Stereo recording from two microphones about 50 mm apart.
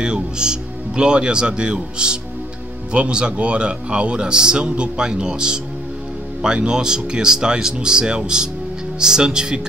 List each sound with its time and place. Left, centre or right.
0.0 s speech: centre